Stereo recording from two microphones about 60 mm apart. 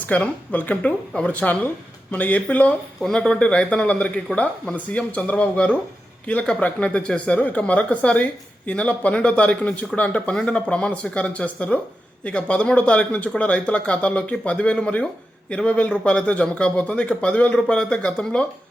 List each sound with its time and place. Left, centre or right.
0.0 s speech: left